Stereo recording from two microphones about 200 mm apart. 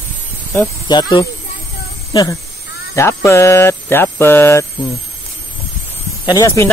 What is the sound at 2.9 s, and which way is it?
Speech, 15° left (ahead or behind).